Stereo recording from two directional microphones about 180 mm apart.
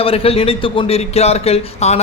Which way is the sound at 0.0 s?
30° left (ahead or behind).